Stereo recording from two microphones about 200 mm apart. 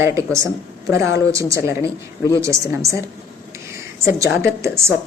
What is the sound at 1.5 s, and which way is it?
Speech, 15° right (ahead or behind).